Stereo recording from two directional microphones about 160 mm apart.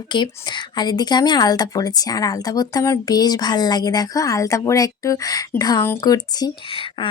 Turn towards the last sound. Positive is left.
turn(degrees=25)  # may be behind; listen again after turning